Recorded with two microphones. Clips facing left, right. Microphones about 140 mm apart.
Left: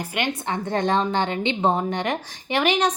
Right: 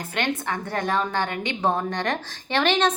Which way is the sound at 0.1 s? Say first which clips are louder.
Right 1 dB; 15° left (ahead or behind).